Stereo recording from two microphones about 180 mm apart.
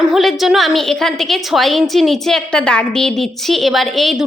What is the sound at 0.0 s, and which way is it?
A woman's voice, centre (ahead or behind).